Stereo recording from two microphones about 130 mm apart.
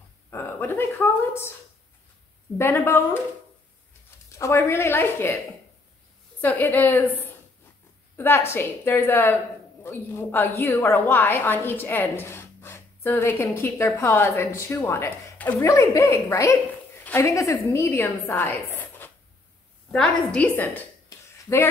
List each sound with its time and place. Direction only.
0.3 s speech: 15° left (ahead or behind)
2.5 s a woman's voice: 20° left (ahead or behind)
4.3 s a woman's voice: 20° left (ahead or behind)
6.4 s a woman's voice: 15° left (ahead or behind)
8.2 s a woman's voice: 20° left (ahead or behind)
15.6 s a woman's voice: 25° left (ahead or behind)